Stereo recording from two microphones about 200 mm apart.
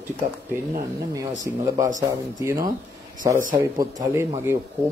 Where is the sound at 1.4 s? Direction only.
15° right (ahead or behind).